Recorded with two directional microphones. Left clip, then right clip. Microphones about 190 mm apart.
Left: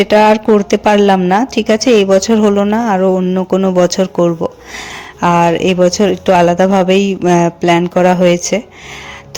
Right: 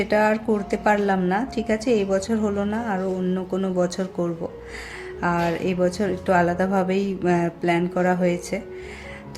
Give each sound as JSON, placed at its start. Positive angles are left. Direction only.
{"t": 0.0, "sound": "speech", "side_deg": 40}